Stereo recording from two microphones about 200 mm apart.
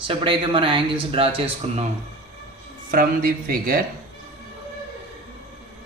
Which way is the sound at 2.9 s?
45° right (ahead or behind).